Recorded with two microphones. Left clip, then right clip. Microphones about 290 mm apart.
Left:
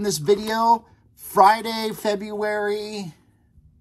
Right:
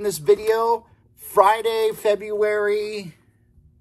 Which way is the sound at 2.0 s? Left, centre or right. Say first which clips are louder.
Right 4 dB; centre.